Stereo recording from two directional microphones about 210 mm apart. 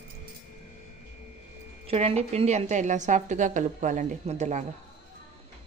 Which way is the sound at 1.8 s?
30° right (ahead or behind).